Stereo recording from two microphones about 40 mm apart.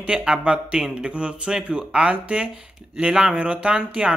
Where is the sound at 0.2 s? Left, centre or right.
Right.